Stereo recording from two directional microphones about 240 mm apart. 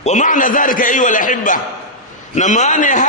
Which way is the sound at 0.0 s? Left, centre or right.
Left.